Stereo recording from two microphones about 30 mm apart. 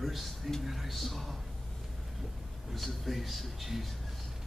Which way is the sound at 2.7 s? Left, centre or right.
Centre.